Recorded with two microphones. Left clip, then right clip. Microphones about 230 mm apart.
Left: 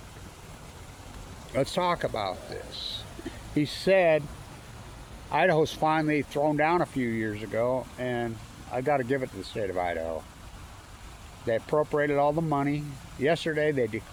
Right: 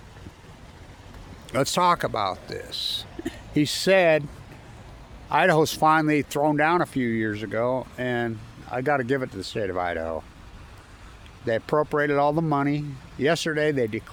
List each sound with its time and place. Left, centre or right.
1.5 s speech: right
5.3 s speech: right
11.4 s speech: right